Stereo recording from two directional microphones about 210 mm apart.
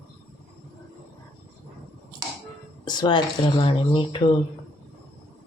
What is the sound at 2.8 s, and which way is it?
Speech, 20° left (ahead or behind).